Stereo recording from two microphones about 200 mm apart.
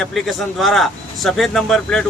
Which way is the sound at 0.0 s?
Centre (ahead or behind).